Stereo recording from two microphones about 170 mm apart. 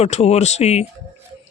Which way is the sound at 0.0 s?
40° left (ahead or behind).